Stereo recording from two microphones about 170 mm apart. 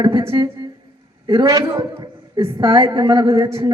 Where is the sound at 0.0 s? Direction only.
30° right (ahead or behind).